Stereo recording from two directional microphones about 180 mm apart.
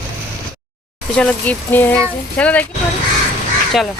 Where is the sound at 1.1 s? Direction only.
10° left (ahead or behind).